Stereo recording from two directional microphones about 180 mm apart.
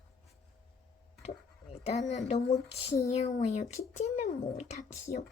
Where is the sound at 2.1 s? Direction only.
40° left (ahead or behind).